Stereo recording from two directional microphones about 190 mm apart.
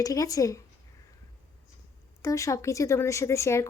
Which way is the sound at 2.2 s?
15° left (ahead or behind).